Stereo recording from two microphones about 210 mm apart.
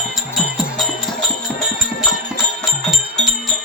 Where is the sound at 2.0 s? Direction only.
Centre (ahead or behind).